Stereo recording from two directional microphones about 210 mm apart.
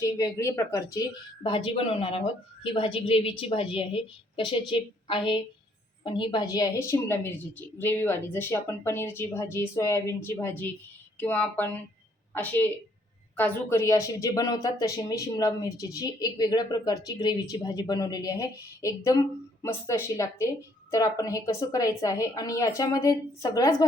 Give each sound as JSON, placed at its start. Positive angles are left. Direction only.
{"t": 0.0, "sound": "speech", "side_deg": 15}
{"t": 1.5, "sound": "a woman's voice", "side_deg": 25}